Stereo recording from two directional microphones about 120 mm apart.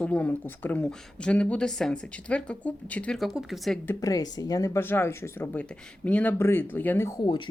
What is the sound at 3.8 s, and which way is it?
Speech, 30° left (ahead or behind).